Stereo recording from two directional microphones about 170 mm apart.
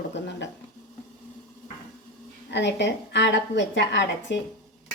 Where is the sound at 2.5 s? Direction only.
90° left.